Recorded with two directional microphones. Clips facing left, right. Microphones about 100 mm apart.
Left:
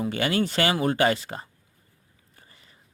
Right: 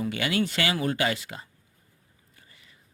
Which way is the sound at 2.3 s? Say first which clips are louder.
Left 2 dB; 35° left (ahead or behind).